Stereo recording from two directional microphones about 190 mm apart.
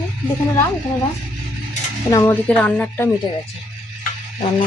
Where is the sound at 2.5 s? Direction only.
5° left (ahead or behind).